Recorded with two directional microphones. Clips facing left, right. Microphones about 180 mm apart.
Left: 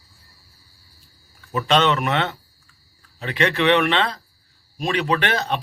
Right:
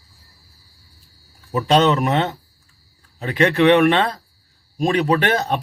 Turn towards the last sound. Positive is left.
turn(degrees=-45)  # may be behind; listen again after turning